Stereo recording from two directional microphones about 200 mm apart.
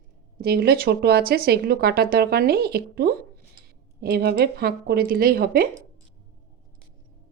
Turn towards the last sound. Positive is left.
turn(degrees=-45)  # may be behind; listen again after turning